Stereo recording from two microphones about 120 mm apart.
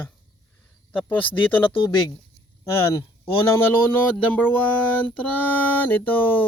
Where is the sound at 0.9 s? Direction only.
15° left (ahead or behind).